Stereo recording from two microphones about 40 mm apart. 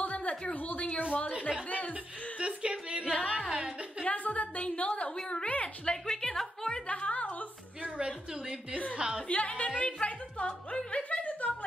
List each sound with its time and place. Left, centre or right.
0.0 s a sound: left
0.6 s a woman's voice: left
2.3 s speech: right
3.1 s a woman's voice: left
3.3 s a woman's voice: right
4.0 s a woman's voice: left
5.9 s a woman's voice: centre
6.9 s a sound: left
7.8 s a woman's voice: right
9.3 s a woman's voice: left
10.9 s music: left